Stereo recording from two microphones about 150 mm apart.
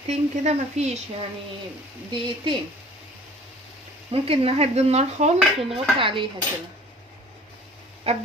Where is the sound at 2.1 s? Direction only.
35° right (ahead or behind).